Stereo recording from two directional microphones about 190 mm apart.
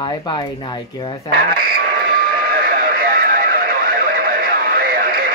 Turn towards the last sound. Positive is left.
turn(degrees=-50)  # may be behind; listen again after turning